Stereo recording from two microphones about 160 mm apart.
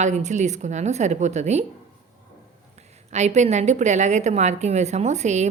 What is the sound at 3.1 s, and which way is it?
A woman's voice, 45° right (ahead or behind).